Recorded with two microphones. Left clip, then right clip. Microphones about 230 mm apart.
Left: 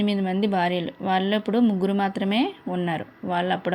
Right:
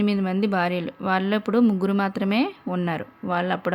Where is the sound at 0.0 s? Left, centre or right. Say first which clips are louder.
Even; centre.